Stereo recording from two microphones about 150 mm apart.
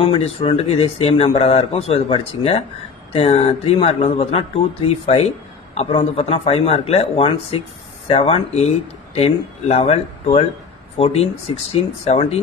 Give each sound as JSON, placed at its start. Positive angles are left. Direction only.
{"t": 0.0, "sound": "speech", "side_deg": 40}